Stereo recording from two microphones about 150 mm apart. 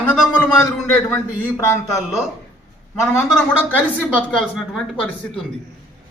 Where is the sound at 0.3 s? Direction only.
15° left (ahead or behind).